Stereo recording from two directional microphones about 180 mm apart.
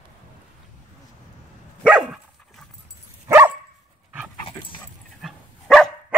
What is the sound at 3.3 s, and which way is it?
Dog, 15° right (ahead or behind).